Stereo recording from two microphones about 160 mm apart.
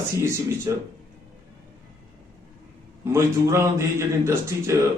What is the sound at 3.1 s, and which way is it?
Speech, 15° right (ahead or behind).